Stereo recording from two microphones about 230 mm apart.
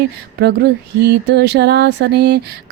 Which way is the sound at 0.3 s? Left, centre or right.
Right.